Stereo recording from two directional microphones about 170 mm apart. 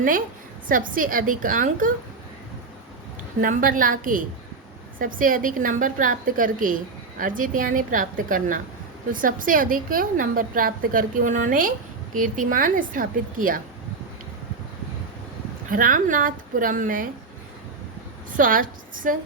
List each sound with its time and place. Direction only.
0.7 s a woman's voice: 55° right (ahead or behind)
3.4 s a woman's voice: 55° right (ahead or behind)
15.7 s a woman's voice: 55° right (ahead or behind)
18.3 s a woman's voice: 55° right (ahead or behind)